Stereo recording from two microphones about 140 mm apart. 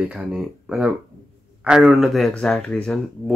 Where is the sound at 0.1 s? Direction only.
5° right (ahead or behind).